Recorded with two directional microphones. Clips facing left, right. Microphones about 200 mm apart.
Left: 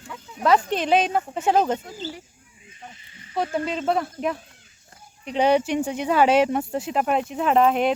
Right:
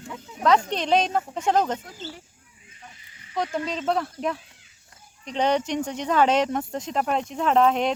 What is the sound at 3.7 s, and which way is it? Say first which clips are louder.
Speech: left 1 dB; 5° left (ahead or behind).